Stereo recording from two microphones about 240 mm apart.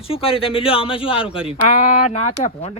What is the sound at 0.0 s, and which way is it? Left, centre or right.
Speech, left.